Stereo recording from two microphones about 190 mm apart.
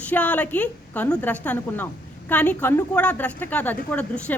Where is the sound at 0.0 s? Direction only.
10° left (ahead or behind).